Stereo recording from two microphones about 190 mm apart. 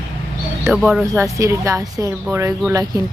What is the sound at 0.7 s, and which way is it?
Speech, centre (ahead or behind).